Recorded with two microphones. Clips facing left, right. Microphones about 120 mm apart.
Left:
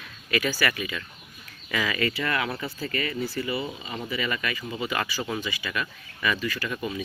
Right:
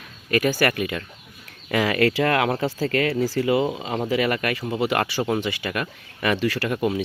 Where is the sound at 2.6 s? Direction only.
85° right.